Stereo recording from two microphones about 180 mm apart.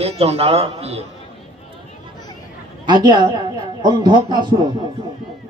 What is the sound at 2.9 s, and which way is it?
A woman's voice, 25° right (ahead or behind).